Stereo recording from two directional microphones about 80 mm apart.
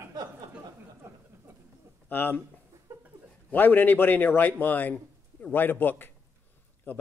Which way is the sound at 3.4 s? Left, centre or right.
Left.